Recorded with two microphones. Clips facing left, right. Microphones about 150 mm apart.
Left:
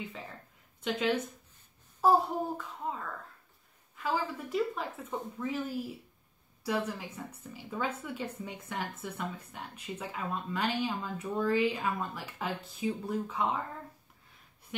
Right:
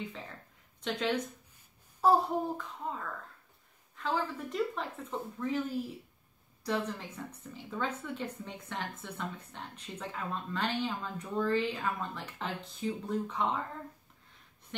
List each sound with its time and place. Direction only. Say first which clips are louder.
0.8 s a child's voice: left 2 dB; 5° left (ahead or behind)
6.6 s speech: left 1 dB; 10° left (ahead or behind)
14.7 s a sound: left 2 dB; 10° left (ahead or behind)